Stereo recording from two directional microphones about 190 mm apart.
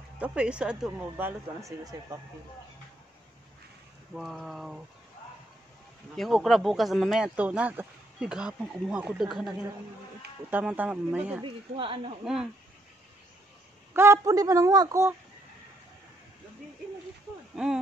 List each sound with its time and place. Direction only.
0.2 s speech: 5° right (ahead or behind)
4.1 s speech: centre (ahead or behind)
6.1 s speech: centre (ahead or behind)
10.5 s speech: 5° right (ahead or behind)
11.4 s speech: 30° right (ahead or behind)
12.3 s speech: 5° right (ahead or behind)
13.9 s speech: 15° right (ahead or behind)
17.6 s speech: 5° right (ahead or behind)